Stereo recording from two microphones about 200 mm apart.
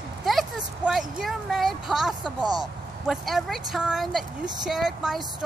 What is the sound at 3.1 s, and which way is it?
Speech, centre (ahead or behind).